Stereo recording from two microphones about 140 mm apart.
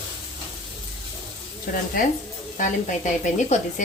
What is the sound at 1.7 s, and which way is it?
Speech, 90° left.